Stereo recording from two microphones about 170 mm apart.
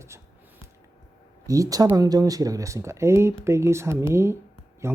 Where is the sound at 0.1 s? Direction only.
15° right (ahead or behind).